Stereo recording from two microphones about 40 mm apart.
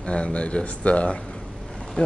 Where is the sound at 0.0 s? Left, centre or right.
Left.